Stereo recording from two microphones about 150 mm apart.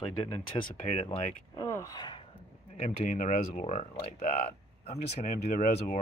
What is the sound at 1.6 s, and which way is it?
Speech, 20° left (ahead or behind).